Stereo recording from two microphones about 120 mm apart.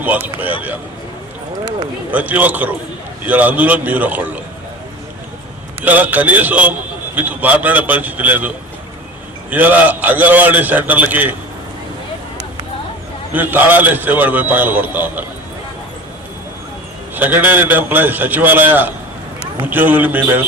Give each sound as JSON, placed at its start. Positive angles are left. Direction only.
{"t": 0.0, "sound": "a man's voice", "side_deg": -15}
{"t": 2.0, "sound": "a man's voice", "side_deg": -15}
{"t": 5.8, "sound": "a man's voice", "side_deg": -15}
{"t": 13.3, "sound": "a man's voice", "side_deg": -15}
{"t": 17.2, "sound": "a man's voice", "side_deg": -15}